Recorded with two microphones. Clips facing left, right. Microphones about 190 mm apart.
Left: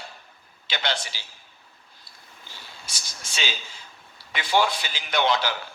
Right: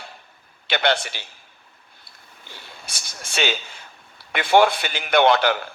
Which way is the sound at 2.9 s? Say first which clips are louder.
Right 5 dB; 60° right (ahead or behind).